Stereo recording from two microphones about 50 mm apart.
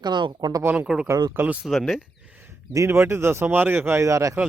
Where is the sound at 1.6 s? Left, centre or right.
Centre.